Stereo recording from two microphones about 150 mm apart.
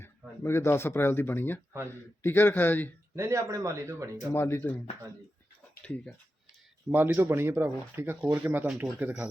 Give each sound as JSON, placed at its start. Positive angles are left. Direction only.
{"t": 0.0, "sound": "a man's voice", "side_deg": 15}
{"t": 3.2, "sound": "speech", "side_deg": -20}
{"t": 4.3, "sound": "a man's voice", "side_deg": 15}
{"t": 6.9, "sound": "speech", "side_deg": -15}